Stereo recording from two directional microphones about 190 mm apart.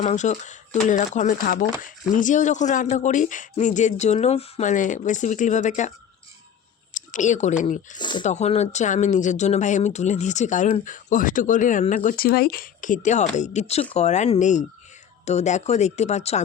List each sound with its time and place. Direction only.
0.0 s speech: 40° left (ahead or behind)
6.9 s a sound: 40° left (ahead or behind)
7.9 s speech: 25° left (ahead or behind)
8.2 s speech: 35° left (ahead or behind)